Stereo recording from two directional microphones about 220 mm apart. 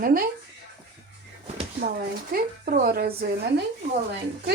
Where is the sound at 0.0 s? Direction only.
40° right (ahead or behind).